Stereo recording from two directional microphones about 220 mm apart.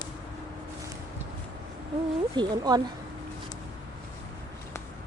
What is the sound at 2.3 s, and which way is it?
Speech, 20° right (ahead or behind).